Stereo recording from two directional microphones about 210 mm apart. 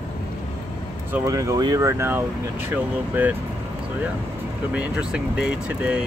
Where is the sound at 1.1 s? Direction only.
15° right (ahead or behind).